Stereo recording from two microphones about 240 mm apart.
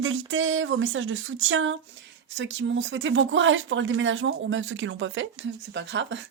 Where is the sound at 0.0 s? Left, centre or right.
Right.